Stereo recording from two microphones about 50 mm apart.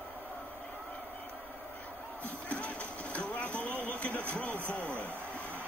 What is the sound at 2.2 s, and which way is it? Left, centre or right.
Music, left.